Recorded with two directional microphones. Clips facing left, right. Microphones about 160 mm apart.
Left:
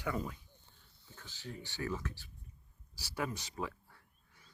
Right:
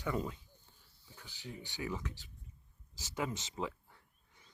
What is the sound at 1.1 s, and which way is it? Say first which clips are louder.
Speech: left 1 dB; 15° right (ahead or behind).